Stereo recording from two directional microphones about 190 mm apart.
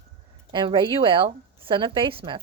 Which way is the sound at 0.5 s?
25° right (ahead or behind).